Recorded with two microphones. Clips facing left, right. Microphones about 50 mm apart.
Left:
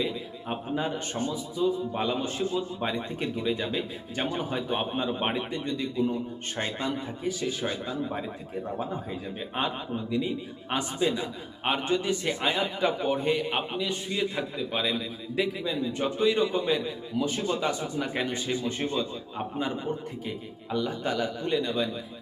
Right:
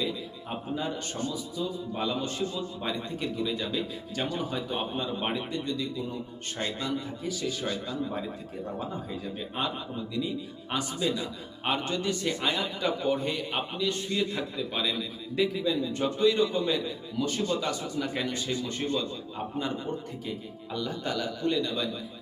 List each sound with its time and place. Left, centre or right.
0.8 s a man's voice: left
9.6 s a man's voice: left